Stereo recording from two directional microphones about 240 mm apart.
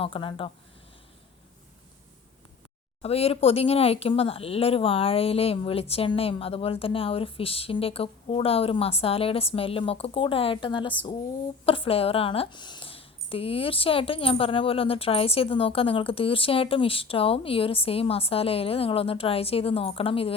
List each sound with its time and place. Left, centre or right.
0.0 s speech: left
3.0 s speech: left